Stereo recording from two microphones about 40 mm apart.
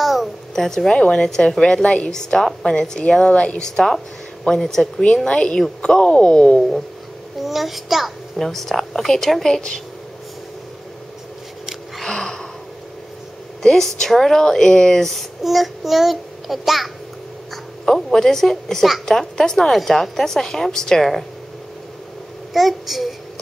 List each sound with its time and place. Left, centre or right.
0.0 s a sound: centre
0.6 s a woman's voice: centre; by 2.0 s left
2.0 s a woman's voice: centre
3.6 s a woman's voice: centre
5.1 s a woman's voice: left
5.6 s a woman's voice: centre
5.9 s a woman's voice: left
7.3 s a child's voice: centre
8.4 s a woman's voice: centre
12.0 s a sound: centre
13.6 s a woman's voice: centre
15.4 s a child's voice: centre
17.8 s a woman's voice: centre
22.5 s a child's voice: centre